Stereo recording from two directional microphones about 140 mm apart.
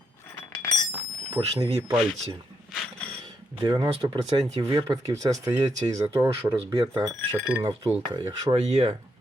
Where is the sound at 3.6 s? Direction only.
30° right (ahead or behind).